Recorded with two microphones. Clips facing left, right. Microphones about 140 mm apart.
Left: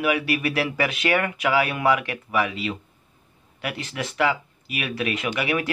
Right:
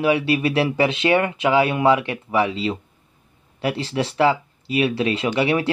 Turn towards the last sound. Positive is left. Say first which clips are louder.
# right 5 dB
turn(degrees=-30)  # may be behind; listen again after turning